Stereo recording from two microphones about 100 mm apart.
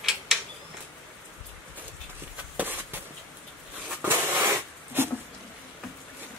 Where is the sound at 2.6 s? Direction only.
20° right (ahead or behind).